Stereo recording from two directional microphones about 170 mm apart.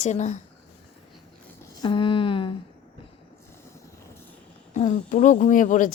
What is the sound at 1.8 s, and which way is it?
Speech, 30° left (ahead or behind).